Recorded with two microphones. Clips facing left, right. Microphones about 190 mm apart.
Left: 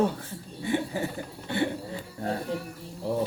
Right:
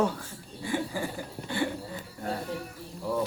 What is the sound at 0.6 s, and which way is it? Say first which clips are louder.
Speech: left 3 dB; 20° left (ahead or behind).